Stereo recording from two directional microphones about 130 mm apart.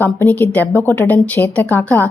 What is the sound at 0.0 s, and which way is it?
A woman's voice, 15° left (ahead or behind).